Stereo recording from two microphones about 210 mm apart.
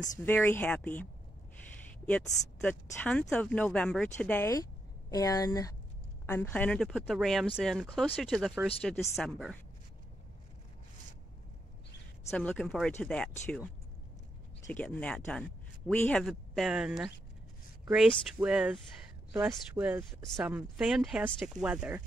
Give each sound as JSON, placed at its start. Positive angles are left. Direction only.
{"t": 0.2, "sound": "a woman's voice", "side_deg": 10}
{"t": 12.3, "sound": "speech", "side_deg": 5}
{"t": 14.7, "sound": "speech", "side_deg": 5}